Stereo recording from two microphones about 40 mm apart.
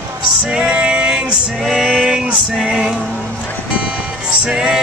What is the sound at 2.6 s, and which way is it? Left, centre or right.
Music, right.